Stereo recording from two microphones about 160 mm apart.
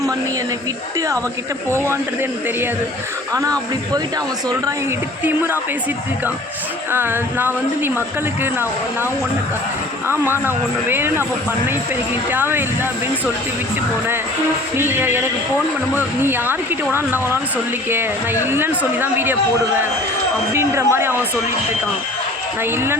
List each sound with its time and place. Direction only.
3.3 s speech: 20° right (ahead or behind)
5.2 s speech: 15° right (ahead or behind)
6.9 s speech: 10° right (ahead or behind)
10.4 s speech: 15° right (ahead or behind)
12.3 s speech: 15° right (ahead or behind)
14.8 s speech: 15° right (ahead or behind)
18.5 s speech: 15° right (ahead or behind)
20.5 s speech: 15° right (ahead or behind)